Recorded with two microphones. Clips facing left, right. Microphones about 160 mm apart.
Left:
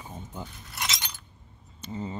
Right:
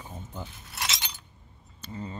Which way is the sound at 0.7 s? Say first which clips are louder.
Even; centre (ahead or behind).